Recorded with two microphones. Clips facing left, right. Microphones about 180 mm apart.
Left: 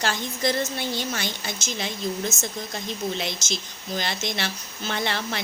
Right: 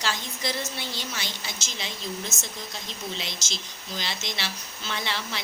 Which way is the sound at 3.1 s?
55° left (ahead or behind).